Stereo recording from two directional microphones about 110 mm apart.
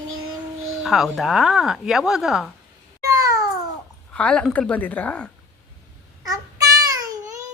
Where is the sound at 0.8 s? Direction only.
Centre (ahead or behind).